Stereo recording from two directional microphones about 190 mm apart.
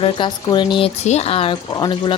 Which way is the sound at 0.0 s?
25° left (ahead or behind).